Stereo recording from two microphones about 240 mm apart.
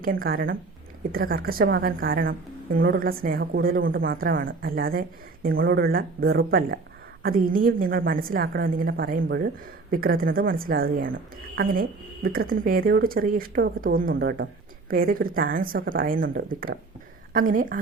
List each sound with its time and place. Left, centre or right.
0.0 s speech: right